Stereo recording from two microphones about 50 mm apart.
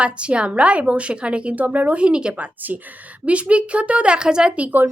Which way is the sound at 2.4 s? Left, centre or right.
Right.